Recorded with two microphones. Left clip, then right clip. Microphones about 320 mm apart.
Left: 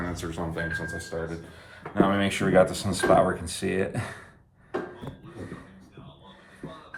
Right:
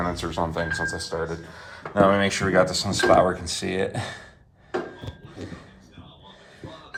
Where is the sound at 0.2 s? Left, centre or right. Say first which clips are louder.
Right 6 dB; centre.